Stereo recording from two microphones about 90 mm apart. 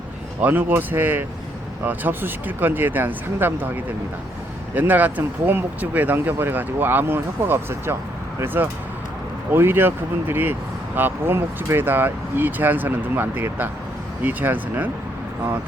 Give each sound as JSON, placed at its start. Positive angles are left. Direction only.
{"t": 0.4, "sound": "speech", "side_deg": -20}
{"t": 4.7, "sound": "speech", "side_deg": -20}